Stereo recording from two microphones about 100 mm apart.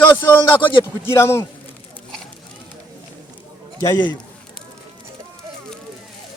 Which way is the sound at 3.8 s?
45° left (ahead or behind).